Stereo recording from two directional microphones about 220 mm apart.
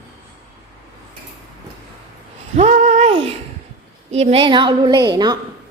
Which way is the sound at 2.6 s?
30° right (ahead or behind).